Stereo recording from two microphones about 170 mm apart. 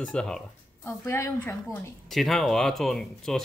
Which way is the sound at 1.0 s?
15° left (ahead or behind).